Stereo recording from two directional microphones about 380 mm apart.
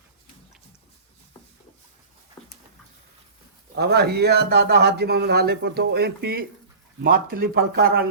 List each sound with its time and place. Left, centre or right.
3.8 s a man's voice: right